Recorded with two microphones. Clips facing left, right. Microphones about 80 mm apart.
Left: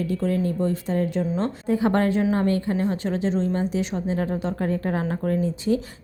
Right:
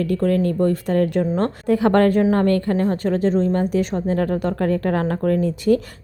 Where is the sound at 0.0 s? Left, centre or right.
Right.